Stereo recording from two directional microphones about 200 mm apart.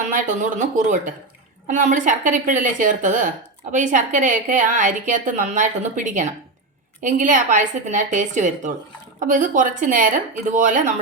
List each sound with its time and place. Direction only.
0.1 s speech: 40° right (ahead or behind)